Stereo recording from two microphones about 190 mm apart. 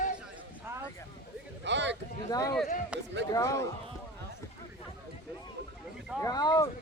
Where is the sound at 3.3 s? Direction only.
15° left (ahead or behind).